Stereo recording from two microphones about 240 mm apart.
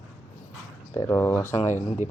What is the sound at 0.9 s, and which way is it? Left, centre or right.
Speech, centre.